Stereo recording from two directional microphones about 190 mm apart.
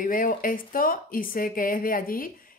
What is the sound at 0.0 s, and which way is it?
Speech, 45° left (ahead or behind).